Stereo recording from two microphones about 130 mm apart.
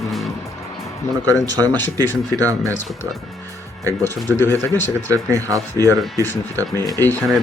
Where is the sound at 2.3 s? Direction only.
25° right (ahead or behind).